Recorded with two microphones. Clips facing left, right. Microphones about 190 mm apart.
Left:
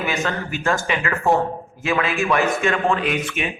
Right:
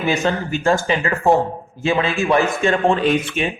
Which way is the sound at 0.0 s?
30° right (ahead or behind).